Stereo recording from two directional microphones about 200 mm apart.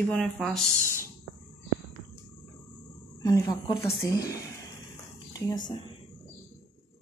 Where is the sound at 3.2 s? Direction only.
20° left (ahead or behind).